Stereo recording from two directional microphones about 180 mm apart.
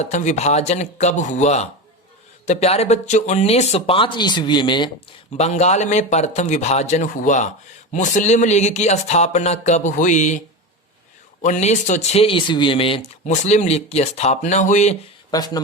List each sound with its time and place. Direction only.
0.0 s speech: 40° left (ahead or behind); by 4.9 s 25° left (ahead or behind)
5.4 s speech: 35° left (ahead or behind)
11.4 s speech: 40° left (ahead or behind)
13.2 s speech: 40° left (ahead or behind)
15.3 s speech: 20° left (ahead or behind)